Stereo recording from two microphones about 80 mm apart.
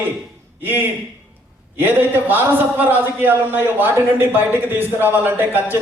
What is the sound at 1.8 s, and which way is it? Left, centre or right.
A man's voice, right.